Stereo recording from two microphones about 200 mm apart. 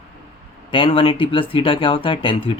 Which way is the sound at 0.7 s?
25° left (ahead or behind).